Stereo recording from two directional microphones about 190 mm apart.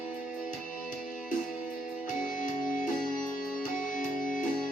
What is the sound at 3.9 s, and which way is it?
Music, 45° left (ahead or behind).